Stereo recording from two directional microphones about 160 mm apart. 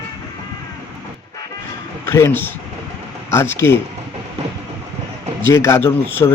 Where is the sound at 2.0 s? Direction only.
15° left (ahead or behind).